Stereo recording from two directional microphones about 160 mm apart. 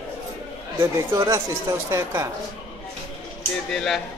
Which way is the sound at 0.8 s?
20° right (ahead or behind).